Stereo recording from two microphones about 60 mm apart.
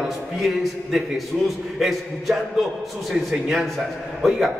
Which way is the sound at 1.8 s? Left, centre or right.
Centre.